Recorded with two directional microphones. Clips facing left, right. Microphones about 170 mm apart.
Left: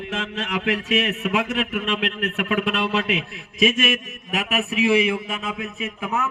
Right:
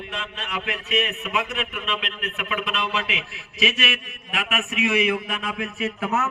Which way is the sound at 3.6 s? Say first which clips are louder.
Left 5 dB; 45° left (ahead or behind).